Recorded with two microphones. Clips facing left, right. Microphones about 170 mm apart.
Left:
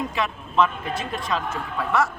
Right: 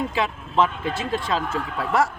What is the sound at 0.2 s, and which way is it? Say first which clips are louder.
Speech: even; 30° right (ahead or behind).